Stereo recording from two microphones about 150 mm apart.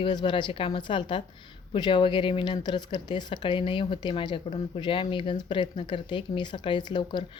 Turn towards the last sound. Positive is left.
turn(degrees=30)  # may be behind; listen again after turning